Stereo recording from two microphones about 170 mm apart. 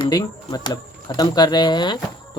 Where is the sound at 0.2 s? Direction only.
25° left (ahead or behind).